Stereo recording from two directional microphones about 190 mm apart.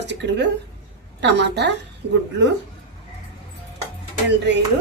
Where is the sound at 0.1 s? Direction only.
65° right (ahead or behind).